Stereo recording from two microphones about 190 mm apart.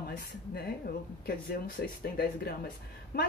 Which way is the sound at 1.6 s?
50° left (ahead or behind).